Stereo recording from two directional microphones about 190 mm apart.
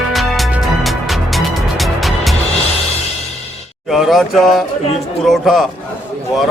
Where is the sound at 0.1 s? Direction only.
Centre (ahead or behind).